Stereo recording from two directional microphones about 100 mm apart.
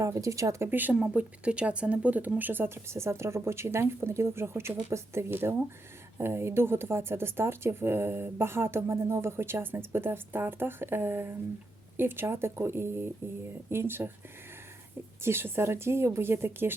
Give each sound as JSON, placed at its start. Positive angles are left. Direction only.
{"t": 0.0, "sound": "speech", "side_deg": -30}
{"t": 0.7, "sound": "speech", "side_deg": -20}
{"t": 15.2, "sound": "speech", "side_deg": -25}